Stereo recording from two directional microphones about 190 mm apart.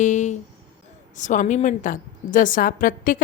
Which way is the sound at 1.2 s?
40° left (ahead or behind).